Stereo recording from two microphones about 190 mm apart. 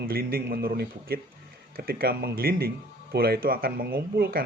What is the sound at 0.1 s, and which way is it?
Speech, 50° right (ahead or behind).